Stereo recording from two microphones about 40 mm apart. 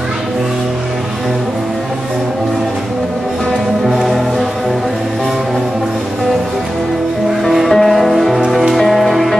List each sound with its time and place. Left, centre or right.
3.8 s music: centre
7.5 s music: centre